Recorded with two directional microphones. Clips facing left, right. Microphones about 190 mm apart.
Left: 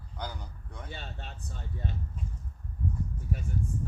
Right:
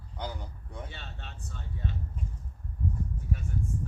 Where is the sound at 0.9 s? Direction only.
40° left (ahead or behind).